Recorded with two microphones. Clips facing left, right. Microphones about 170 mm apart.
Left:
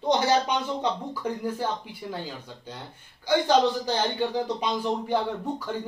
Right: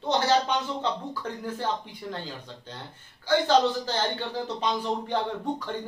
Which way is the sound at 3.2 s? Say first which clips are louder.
Left 1 dB; 15° left (ahead or behind).